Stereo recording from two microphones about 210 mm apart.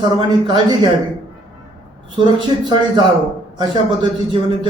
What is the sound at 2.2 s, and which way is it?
A man's voice, 20° right (ahead or behind).